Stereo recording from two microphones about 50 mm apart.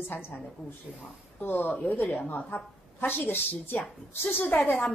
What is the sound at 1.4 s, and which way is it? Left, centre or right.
A woman's voice, left.